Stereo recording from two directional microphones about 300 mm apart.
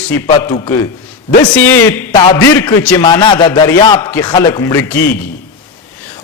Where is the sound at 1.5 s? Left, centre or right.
Centre.